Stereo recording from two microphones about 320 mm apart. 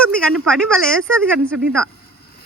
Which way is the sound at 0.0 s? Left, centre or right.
Centre.